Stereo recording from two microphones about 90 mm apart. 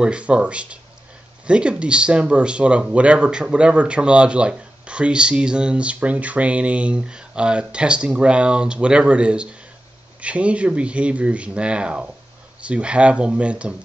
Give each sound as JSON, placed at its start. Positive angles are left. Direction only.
{"t": 0.0, "sound": "speech", "side_deg": -10}